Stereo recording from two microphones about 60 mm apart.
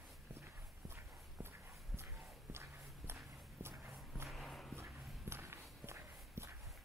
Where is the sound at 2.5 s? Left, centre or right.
Right.